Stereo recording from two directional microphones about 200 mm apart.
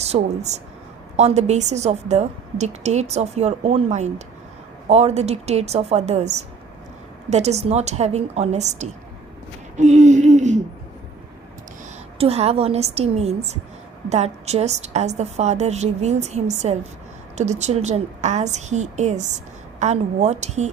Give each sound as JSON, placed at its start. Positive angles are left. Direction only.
{"t": 0.0, "sound": "a woman's voice", "side_deg": -35}
{"t": 12.1, "sound": "a woman's voice", "side_deg": -30}